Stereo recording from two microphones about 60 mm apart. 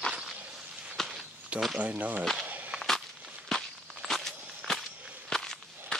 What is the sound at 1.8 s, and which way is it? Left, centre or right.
Speech, right.